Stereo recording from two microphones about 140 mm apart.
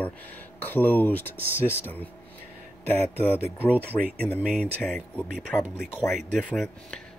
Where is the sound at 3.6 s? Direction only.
10° right (ahead or behind).